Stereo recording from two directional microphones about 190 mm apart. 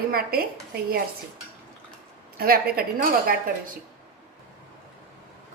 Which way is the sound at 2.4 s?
55° right (ahead or behind).